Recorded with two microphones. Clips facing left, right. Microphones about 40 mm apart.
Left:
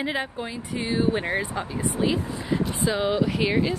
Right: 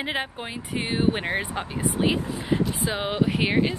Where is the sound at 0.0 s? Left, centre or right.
Right.